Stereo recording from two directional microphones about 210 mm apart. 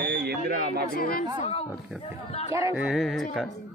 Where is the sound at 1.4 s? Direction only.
25° left (ahead or behind).